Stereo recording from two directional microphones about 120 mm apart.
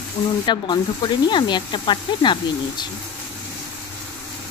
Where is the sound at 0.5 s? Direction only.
40° left (ahead or behind).